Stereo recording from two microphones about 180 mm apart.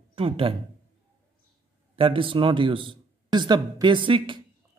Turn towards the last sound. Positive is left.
turn(degrees=-30)  # may be behind; listen again after turning